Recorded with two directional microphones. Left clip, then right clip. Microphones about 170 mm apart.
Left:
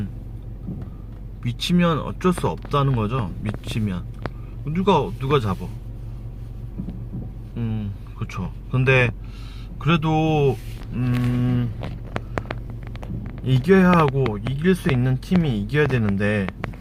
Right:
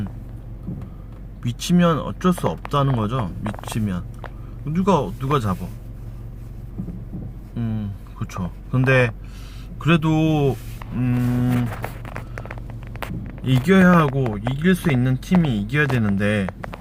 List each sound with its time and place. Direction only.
1.4 s speech: 5° right (ahead or behind)
7.5 s a sound: 10° right (ahead or behind)
9.8 s speech: 15° right (ahead or behind)
13.4 s speech: centre (ahead or behind)